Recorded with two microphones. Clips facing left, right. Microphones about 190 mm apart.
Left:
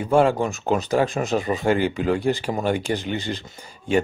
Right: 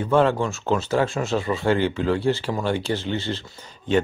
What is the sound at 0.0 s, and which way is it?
Speech, 10° left (ahead or behind).